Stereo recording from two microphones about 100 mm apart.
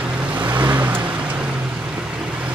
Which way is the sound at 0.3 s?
15° right (ahead or behind).